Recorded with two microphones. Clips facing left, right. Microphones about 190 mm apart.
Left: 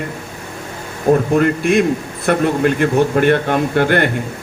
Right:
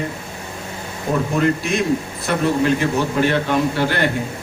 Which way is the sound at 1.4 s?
55° left (ahead or behind).